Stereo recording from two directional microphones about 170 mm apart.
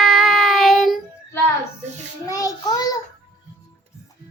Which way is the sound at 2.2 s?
20° left (ahead or behind).